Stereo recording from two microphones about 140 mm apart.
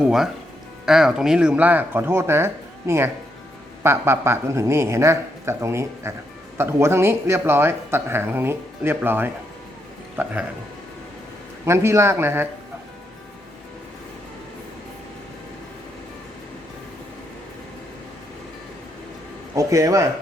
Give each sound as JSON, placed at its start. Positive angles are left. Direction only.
{"t": 0.0, "sound": "speech", "side_deg": -5}
{"t": 11.6, "sound": "speech", "side_deg": -20}
{"t": 19.5, "sound": "speech", "side_deg": -25}